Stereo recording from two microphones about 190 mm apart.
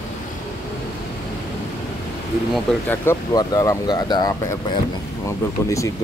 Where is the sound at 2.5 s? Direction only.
Centre (ahead or behind).